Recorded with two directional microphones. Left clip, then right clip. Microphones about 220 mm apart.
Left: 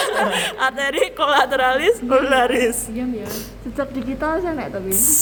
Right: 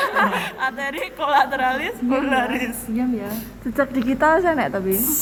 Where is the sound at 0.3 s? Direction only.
60° left (ahead or behind).